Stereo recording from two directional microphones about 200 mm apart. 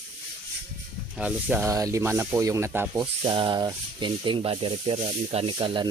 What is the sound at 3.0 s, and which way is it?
Speech, 25° right (ahead or behind).